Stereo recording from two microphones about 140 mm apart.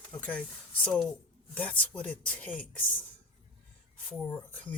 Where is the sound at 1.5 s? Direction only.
10° left (ahead or behind).